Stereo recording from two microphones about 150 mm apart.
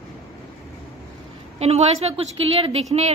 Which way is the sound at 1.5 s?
45° right (ahead or behind).